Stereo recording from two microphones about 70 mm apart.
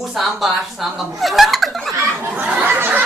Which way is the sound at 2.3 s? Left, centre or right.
Right.